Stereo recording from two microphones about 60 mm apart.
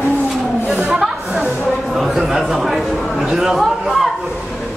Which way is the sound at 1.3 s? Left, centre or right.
Right.